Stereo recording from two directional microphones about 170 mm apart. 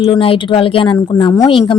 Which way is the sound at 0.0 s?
30° left (ahead or behind).